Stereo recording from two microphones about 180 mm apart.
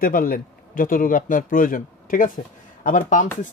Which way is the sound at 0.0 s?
50° left (ahead or behind).